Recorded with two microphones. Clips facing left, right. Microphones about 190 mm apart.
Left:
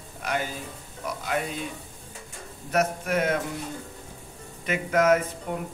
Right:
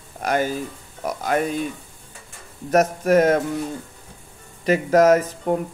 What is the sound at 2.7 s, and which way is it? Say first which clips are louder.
Speech: right 8 dB; 40° right (ahead or behind).